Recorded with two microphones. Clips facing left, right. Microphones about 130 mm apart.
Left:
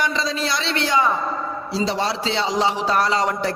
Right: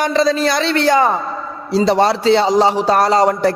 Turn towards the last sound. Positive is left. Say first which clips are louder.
# right 8 dB
turn(degrees=-40)  # may be behind; listen again after turning